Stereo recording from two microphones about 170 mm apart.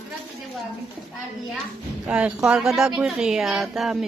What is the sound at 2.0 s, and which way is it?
Speech, 5° right (ahead or behind).